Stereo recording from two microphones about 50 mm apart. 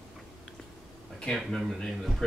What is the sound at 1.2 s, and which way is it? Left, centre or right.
Speech, centre.